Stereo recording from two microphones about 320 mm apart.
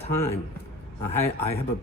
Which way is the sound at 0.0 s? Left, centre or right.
Centre.